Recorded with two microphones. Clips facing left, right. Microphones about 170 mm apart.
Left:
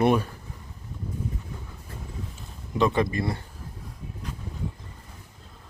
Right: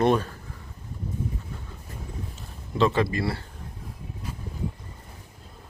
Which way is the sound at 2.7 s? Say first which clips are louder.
Right 1 dB; 15° left (ahead or behind).